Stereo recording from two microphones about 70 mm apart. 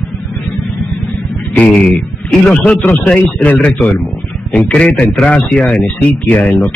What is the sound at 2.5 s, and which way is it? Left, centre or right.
Speech, centre.